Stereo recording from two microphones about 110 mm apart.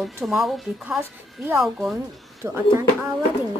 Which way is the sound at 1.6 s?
Centre (ahead or behind).